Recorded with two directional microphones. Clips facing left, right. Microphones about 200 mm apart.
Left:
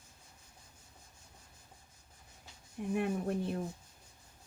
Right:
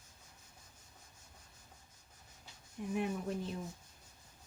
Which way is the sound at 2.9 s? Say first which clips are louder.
Left 3 dB; 60° left (ahead or behind).